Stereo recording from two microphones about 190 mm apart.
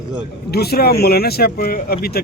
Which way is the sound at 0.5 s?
55° left (ahead or behind).